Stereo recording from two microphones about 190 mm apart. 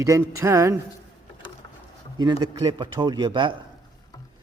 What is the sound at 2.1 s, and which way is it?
A man's voice, 20° right (ahead or behind).